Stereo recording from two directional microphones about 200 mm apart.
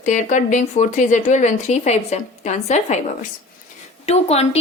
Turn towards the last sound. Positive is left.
turn(degrees=30)  # may be behind; listen again after turning